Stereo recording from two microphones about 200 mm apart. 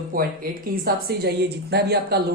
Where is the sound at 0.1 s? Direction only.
45° right (ahead or behind).